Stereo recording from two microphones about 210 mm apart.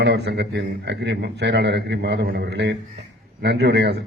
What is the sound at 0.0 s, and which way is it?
A man's voice, 55° right (ahead or behind).